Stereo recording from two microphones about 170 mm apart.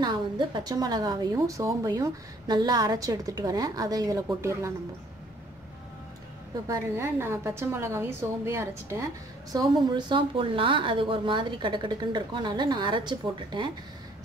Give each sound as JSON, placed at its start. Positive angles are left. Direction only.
{"t": 0.0, "sound": "a woman's voice", "side_deg": -25}
{"t": 6.7, "sound": "a woman's voice", "side_deg": -15}